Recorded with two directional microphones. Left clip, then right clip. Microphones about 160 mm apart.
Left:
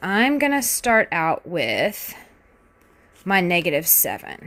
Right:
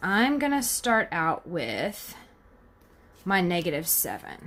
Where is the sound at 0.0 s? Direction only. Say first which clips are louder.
Left 5 dB; 45° left (ahead or behind).